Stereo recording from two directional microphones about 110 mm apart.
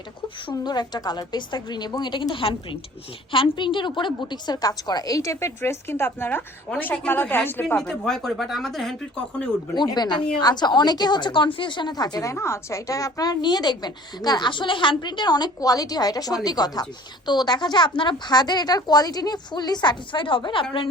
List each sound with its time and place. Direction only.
0.5 s a woman's voice: 40° left (ahead or behind); by 7.6 s 20° left (ahead or behind)
7.8 s speech: 5° left (ahead or behind)
9.7 s a woman's voice: 40° left (ahead or behind)